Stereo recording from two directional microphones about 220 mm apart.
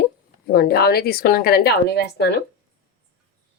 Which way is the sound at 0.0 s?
45° left (ahead or behind).